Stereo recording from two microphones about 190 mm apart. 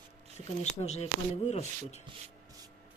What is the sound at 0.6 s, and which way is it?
Speech, 35° left (ahead or behind).